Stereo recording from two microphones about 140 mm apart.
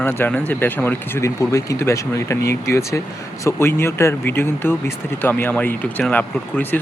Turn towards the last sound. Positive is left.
turn(degrees=15)  # may be behind; listen again after turning